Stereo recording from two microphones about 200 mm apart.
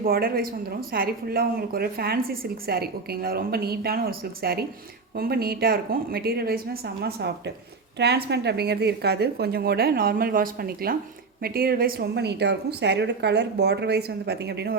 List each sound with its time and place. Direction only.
0.0 s a woman's voice: 50° right (ahead or behind)